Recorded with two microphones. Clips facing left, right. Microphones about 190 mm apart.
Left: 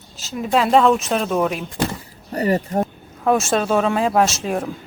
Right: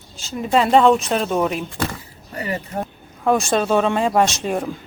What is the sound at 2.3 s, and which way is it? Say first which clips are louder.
Speech: left 7 dB; 40° left (ahead or behind).